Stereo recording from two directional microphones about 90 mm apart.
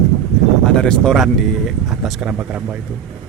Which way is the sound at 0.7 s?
10° left (ahead or behind).